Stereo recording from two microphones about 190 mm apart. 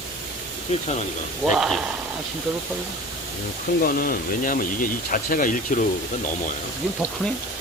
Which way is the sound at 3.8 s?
50° left (ahead or behind).